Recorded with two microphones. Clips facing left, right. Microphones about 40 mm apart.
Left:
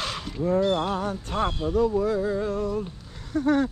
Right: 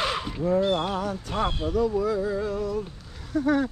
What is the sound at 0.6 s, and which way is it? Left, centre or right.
Speech, centre.